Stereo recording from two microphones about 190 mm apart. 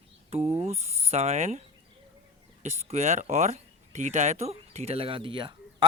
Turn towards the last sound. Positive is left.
turn(degrees=-25)  # may be behind; listen again after turning